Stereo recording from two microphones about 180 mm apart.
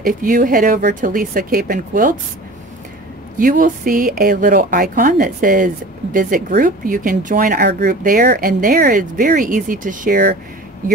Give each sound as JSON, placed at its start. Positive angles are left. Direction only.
{"t": 0.0, "sound": "speech", "side_deg": -50}
{"t": 3.3, "sound": "speech", "side_deg": -50}